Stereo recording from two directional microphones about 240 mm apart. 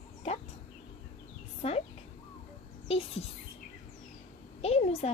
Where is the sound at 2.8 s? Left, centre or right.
Left.